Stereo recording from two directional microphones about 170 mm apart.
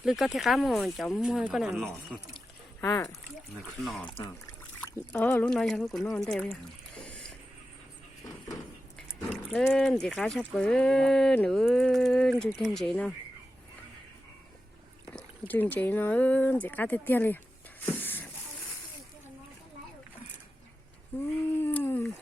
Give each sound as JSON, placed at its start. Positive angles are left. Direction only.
{"t": 0.0, "sound": "speech", "side_deg": 0}
{"t": 2.8, "sound": "speech", "side_deg": 20}
{"t": 3.5, "sound": "speech", "side_deg": 0}
{"t": 5.1, "sound": "speech", "side_deg": 10}
{"t": 7.0, "sound": "a sound", "side_deg": 5}
{"t": 9.3, "sound": "speech", "side_deg": 0}
{"t": 15.1, "sound": "speech", "side_deg": 10}
{"t": 17.9, "sound": "a sound", "side_deg": 10}
{"t": 21.6, "sound": "dog", "side_deg": 10}